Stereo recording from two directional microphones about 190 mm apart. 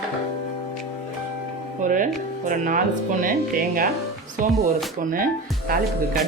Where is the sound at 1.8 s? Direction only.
45° right (ahead or behind).